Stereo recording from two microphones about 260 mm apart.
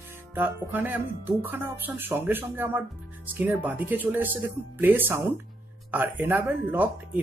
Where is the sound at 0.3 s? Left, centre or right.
Centre.